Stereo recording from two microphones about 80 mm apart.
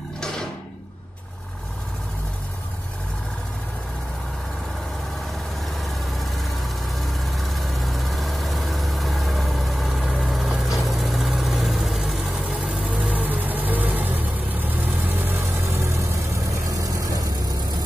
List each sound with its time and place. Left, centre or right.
5.8 s vehicle: centre
12.6 s vehicle: right
16.7 s vehicle: right